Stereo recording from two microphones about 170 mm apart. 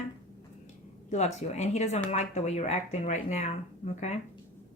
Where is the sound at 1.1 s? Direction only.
40° left (ahead or behind).